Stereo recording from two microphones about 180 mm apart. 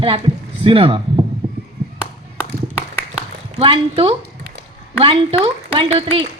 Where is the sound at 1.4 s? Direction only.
10° right (ahead or behind).